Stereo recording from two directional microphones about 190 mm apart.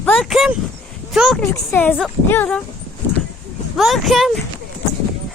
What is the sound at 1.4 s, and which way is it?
Speech, 10° left (ahead or behind).